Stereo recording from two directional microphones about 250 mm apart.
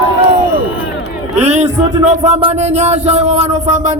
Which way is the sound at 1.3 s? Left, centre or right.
Right.